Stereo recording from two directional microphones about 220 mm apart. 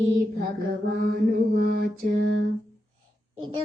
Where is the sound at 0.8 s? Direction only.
45° right (ahead or behind).